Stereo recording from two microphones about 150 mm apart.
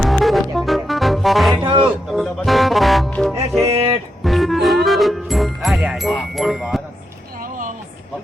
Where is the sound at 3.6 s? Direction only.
40° right (ahead or behind).